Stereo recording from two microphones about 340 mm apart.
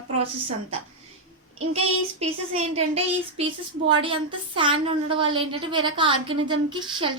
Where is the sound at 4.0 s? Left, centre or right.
Centre.